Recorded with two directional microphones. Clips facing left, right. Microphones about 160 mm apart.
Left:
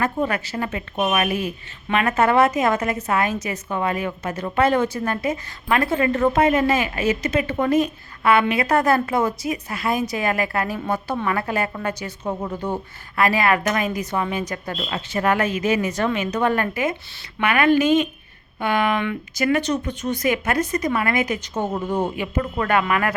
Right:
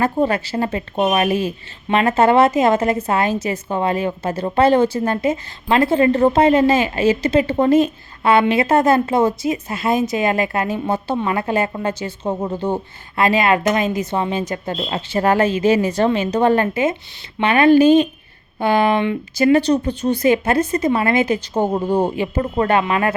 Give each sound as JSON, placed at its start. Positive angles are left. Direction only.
{"t": 0.0, "sound": "speech", "side_deg": -30}